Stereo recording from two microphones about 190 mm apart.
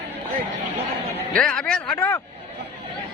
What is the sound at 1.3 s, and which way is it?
Speech, 5° left (ahead or behind).